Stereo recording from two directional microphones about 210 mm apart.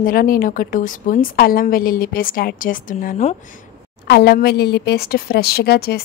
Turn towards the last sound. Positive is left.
turn(degrees=50)  # may be behind; listen again after turning